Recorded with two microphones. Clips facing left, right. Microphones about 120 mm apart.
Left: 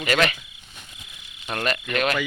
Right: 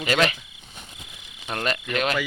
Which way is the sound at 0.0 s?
20° right (ahead or behind).